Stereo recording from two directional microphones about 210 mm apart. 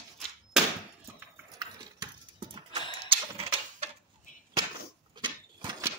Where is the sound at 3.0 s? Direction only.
25° right (ahead or behind).